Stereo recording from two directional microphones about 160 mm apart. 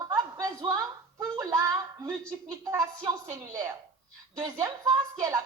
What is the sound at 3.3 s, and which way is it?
A woman's voice, 20° right (ahead or behind).